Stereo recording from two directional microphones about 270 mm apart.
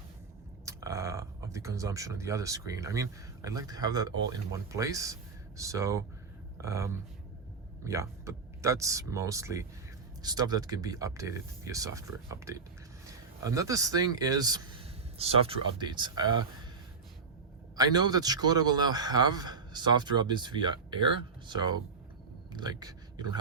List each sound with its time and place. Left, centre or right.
0.6 s a man's voice: centre
17.7 s a man's voice: centre